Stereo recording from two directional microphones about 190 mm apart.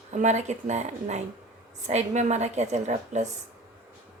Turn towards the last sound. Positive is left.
turn(degrees=-40)  # may be behind; listen again after turning